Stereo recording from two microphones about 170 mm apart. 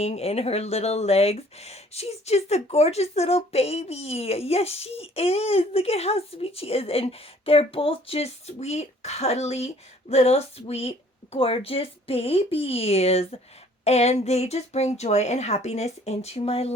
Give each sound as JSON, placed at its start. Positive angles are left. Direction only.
{"t": 0.0, "sound": "speech", "side_deg": 40}